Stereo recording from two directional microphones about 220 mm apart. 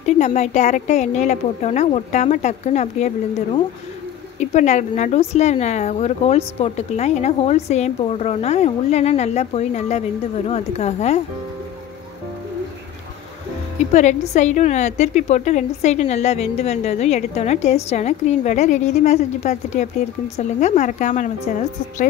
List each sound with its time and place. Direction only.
0.0 s a woman's voice: 30° left (ahead or behind)
13.9 s a woman's voice: 30° left (ahead or behind)